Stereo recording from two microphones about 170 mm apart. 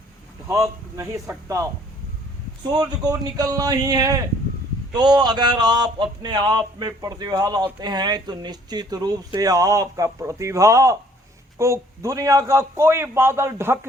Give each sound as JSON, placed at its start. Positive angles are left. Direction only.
{"t": 0.4, "sound": "a man's voice", "side_deg": -20}
{"t": 3.0, "sound": "a man's voice", "side_deg": -25}